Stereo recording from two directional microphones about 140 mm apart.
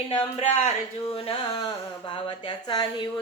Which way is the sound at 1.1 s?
40° left (ahead or behind).